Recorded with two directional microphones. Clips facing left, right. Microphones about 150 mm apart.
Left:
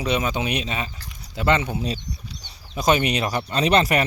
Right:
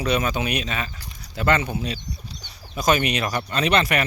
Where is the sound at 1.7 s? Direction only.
35° left (ahead or behind).